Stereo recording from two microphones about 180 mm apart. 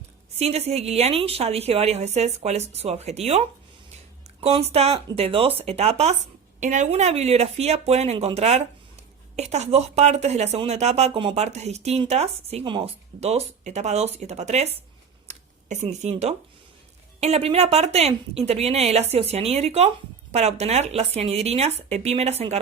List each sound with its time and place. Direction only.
0.3 s speech: 35° right (ahead or behind)
15.3 s a sound: 40° right (ahead or behind)
17.2 s speech: 35° right (ahead or behind)